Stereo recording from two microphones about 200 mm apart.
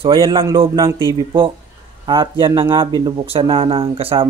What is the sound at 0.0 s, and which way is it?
Speech, 25° right (ahead or behind).